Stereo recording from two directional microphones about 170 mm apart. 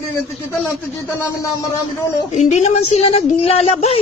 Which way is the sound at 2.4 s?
40° left (ahead or behind).